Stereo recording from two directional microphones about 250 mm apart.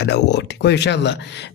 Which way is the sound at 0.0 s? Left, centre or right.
Left.